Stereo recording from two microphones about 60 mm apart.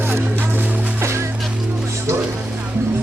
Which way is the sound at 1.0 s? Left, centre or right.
Right.